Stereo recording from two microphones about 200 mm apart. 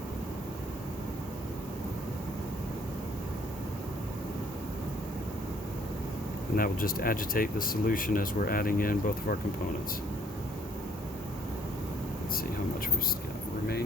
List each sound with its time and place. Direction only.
6.6 s speech: 45° left (ahead or behind)